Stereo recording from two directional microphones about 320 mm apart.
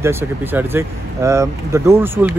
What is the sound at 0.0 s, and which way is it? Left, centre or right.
Speech, centre.